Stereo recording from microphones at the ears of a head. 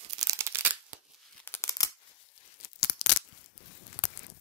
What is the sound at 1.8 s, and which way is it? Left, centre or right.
Tearing, left.